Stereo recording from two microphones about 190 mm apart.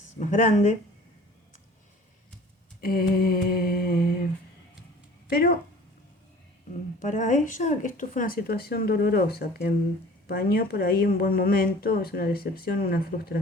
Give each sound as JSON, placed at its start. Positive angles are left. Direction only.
{"t": 0.2, "sound": "speech", "side_deg": 40}
{"t": 2.8, "sound": "a woman's voice", "side_deg": 50}
{"t": 5.3, "sound": "a woman's voice", "side_deg": 55}
{"t": 7.0, "sound": "a woman's voice", "side_deg": 40}